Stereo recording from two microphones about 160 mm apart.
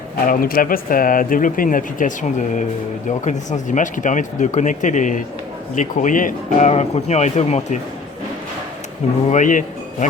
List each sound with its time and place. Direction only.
0.3 s speech: 65° left (ahead or behind); by 7.8 s 45° left (ahead or behind)
9.3 s speech: 55° left (ahead or behind)